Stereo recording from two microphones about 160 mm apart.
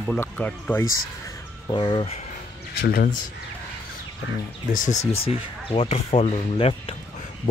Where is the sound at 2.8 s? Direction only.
70° left (ahead or behind).